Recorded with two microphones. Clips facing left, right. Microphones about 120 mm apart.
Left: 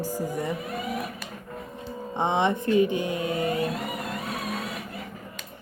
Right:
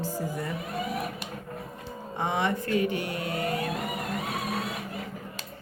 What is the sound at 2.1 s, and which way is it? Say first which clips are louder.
Speech: left 4 dB; 20° left (ahead or behind).